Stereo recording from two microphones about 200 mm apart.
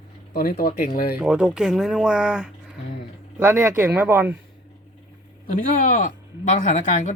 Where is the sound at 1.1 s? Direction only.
5° right (ahead or behind).